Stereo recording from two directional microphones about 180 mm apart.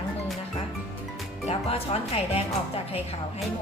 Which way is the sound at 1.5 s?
35° left (ahead or behind).